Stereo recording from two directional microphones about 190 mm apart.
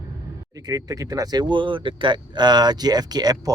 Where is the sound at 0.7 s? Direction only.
20° right (ahead or behind).